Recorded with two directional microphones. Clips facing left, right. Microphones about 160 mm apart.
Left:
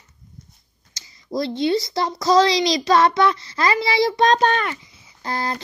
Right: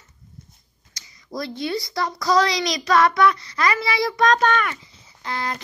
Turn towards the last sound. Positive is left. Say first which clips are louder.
# left 3 dB
turn(degrees=35)  # may be behind; listen again after turning